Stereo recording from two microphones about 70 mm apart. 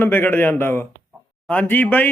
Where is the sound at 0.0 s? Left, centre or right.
Left.